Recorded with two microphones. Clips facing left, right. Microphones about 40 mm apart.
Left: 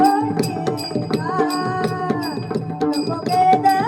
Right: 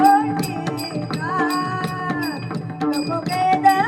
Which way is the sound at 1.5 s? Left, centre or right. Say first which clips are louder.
Even; right.